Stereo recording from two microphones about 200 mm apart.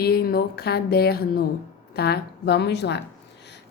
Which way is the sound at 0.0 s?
50° left (ahead or behind).